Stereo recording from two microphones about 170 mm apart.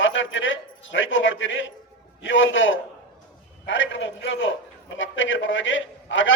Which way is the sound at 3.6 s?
90° left.